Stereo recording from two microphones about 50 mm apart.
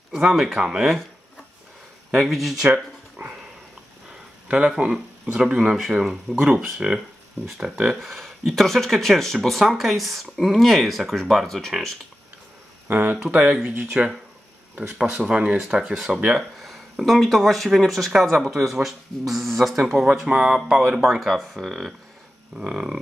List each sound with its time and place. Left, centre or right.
0.2 s speech: centre
2.1 s speech: centre
2.7 s dog: right
4.5 s speech: right; by 11.7 s centre
12.8 s speech: right
13.3 s speech: centre
15.8 s speech: centre
20.2 s speech: centre
22.7 s speech: centre